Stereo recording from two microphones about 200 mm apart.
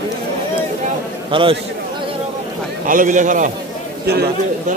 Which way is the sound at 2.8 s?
40° right (ahead or behind).